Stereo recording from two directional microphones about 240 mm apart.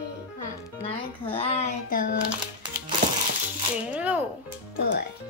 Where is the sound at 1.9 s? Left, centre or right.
Left.